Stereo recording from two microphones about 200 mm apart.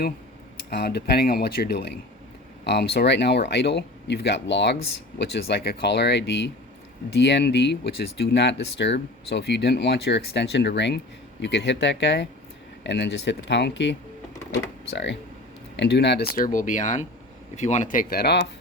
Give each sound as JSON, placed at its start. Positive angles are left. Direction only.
{"t": 0.7, "sound": "speech", "side_deg": 55}